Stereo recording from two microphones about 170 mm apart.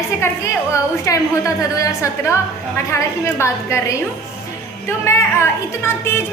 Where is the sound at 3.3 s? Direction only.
15° left (ahead or behind).